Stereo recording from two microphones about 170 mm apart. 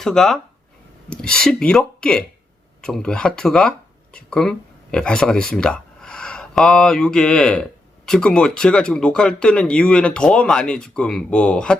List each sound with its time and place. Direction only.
0.0 s speech: centre (ahead or behind)